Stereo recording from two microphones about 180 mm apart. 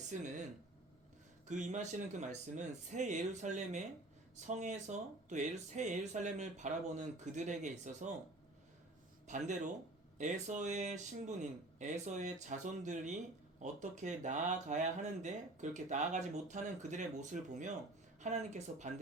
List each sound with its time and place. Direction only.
0.1 s speech: 45° right (ahead or behind)
1.5 s speech: 40° right (ahead or behind)
9.2 s speech: 40° right (ahead or behind)